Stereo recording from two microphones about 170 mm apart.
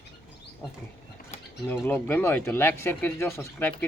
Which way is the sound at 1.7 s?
15° left (ahead or behind).